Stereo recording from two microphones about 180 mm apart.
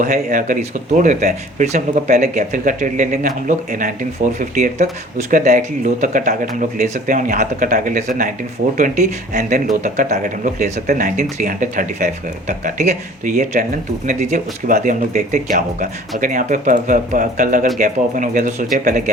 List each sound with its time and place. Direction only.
0.0 s speech: 50° right (ahead or behind)